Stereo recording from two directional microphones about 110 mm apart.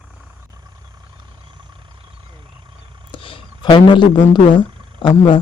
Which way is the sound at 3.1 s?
55° left (ahead or behind).